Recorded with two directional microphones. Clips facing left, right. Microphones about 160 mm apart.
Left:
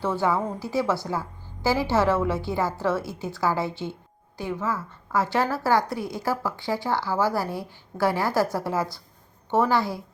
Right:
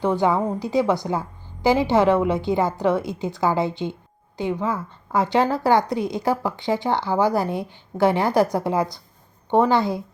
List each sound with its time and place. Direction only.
0.0 s a woman's voice: 15° right (ahead or behind)